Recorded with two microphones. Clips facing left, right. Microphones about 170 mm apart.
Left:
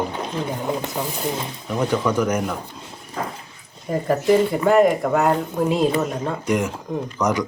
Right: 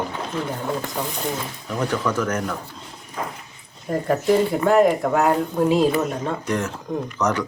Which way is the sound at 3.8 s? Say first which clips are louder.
Left 1 dB; centre (ahead or behind).